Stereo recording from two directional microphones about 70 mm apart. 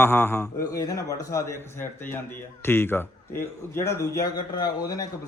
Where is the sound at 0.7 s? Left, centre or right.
Left.